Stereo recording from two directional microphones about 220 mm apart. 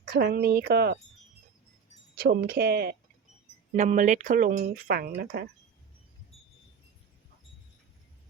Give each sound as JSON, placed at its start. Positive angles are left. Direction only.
{"t": 0.0, "sound": "speech", "side_deg": -45}
{"t": 2.1, "sound": "speech", "side_deg": -45}
{"t": 3.7, "sound": "speech", "side_deg": -35}